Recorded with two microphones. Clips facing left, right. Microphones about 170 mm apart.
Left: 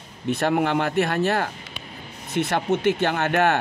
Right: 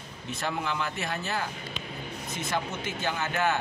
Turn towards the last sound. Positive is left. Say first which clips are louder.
# left 7 dB
turn(degrees=70)  # may be behind; listen again after turning